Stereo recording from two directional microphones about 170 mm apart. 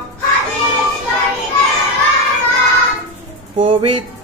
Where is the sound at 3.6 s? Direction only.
30° right (ahead or behind).